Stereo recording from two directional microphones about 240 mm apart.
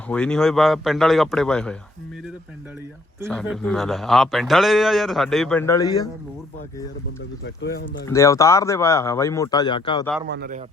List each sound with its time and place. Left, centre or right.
0.1 s a man's voice: centre
3.2 s a man's voice: centre
7.4 s speech: left
8.0 s speech: centre
10.2 s a man's voice: right